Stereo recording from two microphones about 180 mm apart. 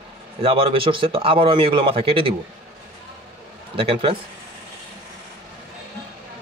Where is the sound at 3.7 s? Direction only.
30° right (ahead or behind).